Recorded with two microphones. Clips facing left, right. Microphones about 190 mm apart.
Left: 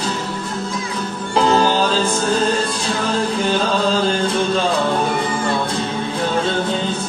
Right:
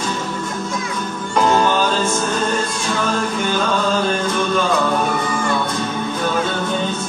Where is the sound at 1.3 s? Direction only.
30° left (ahead or behind).